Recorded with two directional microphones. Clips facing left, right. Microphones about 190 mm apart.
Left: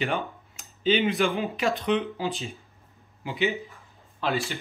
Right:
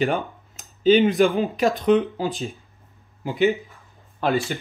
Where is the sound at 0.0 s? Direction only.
45° right (ahead or behind).